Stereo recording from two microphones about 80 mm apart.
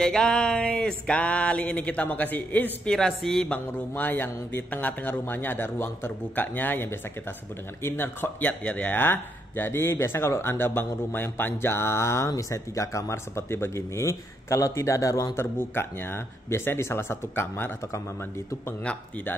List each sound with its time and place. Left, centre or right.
0.0 s a sound: centre
2.9 s speech: centre; by 15.3 s left
15.3 s speech: left